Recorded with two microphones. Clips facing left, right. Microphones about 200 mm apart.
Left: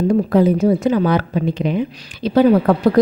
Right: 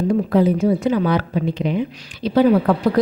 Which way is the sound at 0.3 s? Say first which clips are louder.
Left 1 dB; 45° left (ahead or behind).